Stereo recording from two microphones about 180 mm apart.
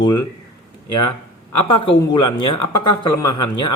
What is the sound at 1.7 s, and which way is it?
A man's voice, 25° left (ahead or behind).